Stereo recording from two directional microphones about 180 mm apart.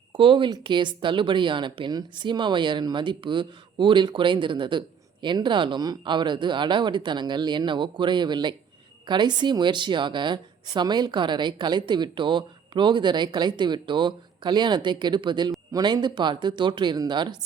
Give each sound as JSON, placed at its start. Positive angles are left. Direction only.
{"t": 0.1, "sound": "speech", "side_deg": -30}